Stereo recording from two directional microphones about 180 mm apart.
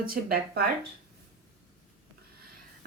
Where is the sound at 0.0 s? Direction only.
55° right (ahead or behind).